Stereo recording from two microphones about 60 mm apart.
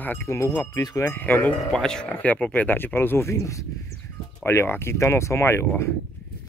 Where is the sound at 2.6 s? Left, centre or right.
Left.